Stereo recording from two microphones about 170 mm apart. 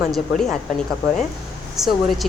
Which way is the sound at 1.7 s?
Centre (ahead or behind).